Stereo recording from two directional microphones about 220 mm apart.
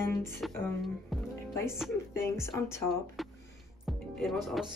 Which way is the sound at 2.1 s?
10° left (ahead or behind).